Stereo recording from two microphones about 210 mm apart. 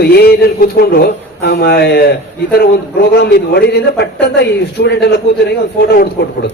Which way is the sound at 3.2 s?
50° left (ahead or behind).